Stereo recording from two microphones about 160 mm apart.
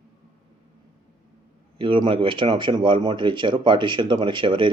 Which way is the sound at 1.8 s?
30° right (ahead or behind).